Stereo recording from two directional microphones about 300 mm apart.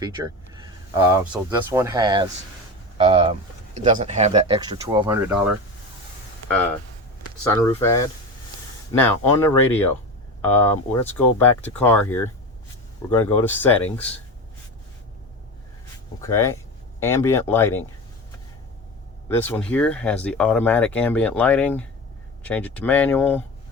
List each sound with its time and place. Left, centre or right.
1.1 s speech: centre
6.5 s speech: centre
16.2 s speech: centre
19.3 s speech: centre